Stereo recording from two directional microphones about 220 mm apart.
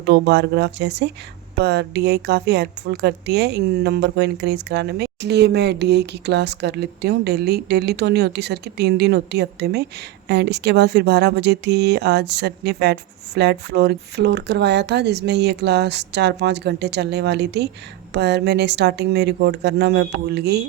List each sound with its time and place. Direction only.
0.0 s a woman's voice: 50° right (ahead or behind)